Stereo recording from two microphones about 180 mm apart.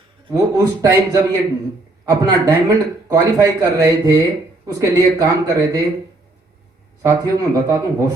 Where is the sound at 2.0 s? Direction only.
20° right (ahead or behind).